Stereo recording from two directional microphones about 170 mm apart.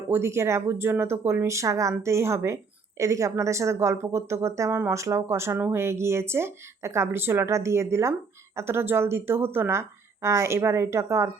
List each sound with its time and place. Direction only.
0.1 s speech: 15° right (ahead or behind)